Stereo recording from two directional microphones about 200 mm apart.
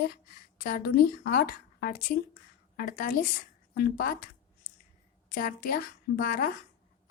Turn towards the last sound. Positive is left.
turn(degrees=45)  # may be behind; listen again after turning